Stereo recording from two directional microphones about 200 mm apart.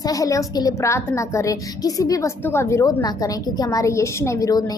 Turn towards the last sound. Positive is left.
turn(degrees=20)  # may be behind; listen again after turning